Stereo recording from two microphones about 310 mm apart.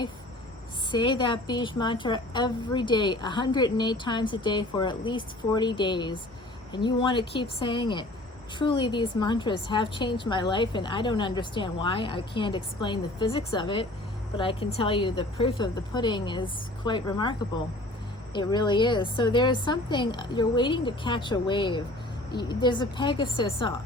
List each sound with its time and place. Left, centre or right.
0.9 s a woman's voice: centre
18.3 s a woman's voice: centre